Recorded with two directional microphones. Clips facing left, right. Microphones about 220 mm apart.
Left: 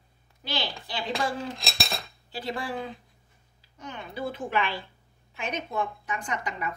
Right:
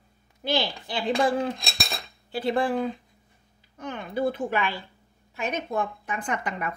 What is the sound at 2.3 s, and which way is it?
Speech, 55° right (ahead or behind).